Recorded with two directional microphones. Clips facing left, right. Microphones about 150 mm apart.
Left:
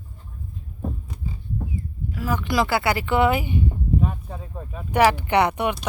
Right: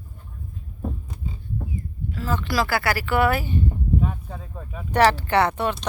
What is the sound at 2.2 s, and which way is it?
Speech, 10° left (ahead or behind).